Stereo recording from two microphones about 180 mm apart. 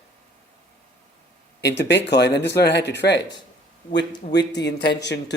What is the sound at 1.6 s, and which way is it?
Speech, 75° left (ahead or behind).